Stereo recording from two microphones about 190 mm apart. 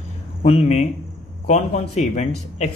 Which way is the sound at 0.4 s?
35° left (ahead or behind).